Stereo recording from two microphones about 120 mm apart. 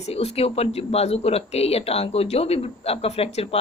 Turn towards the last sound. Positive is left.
turn(degrees=60)  # may be behind; listen again after turning